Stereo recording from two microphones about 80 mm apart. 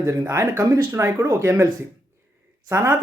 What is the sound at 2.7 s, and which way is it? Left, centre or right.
Speech, right.